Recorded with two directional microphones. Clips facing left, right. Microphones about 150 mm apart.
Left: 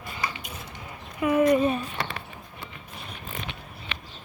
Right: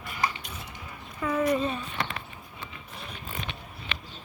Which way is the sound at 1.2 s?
15° left (ahead or behind).